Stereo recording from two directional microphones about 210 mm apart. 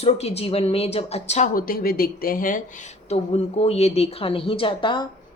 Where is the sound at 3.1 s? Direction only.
30° left (ahead or behind).